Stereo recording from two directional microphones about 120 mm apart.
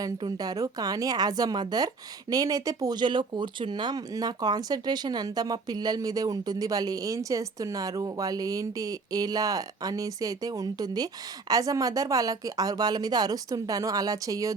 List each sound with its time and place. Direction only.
0.2 s speech: 35° right (ahead or behind)